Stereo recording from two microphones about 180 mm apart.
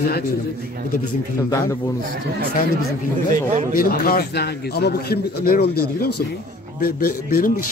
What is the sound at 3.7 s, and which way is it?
A man's voice, 50° left (ahead or behind).